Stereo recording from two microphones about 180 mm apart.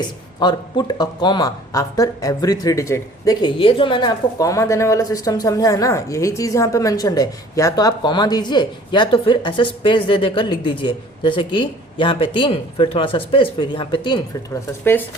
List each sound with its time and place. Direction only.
0.3 s speech: 25° left (ahead or behind)